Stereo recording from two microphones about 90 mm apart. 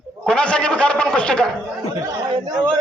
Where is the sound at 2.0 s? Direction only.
45° right (ahead or behind).